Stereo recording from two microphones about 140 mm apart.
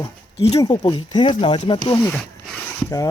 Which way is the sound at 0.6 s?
25° left (ahead or behind).